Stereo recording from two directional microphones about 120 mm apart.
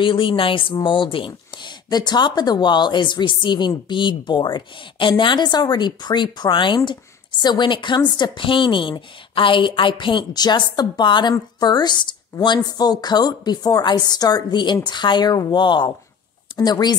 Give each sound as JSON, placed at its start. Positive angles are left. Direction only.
{"t": 0.0, "sound": "speech", "side_deg": 45}